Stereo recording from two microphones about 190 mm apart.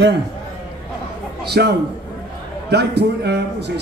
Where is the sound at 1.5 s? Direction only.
60° right (ahead or behind).